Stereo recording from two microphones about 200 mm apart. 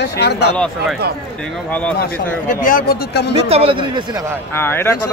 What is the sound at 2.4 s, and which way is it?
Speech, 45° left (ahead or behind).